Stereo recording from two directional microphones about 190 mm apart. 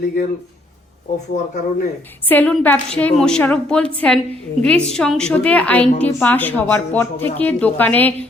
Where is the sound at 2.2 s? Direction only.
10° left (ahead or behind).